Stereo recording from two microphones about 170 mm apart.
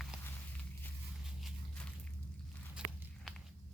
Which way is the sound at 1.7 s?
5° left (ahead or behind).